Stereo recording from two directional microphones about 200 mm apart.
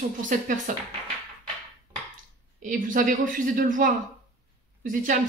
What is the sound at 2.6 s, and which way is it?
Speech, 40° right (ahead or behind).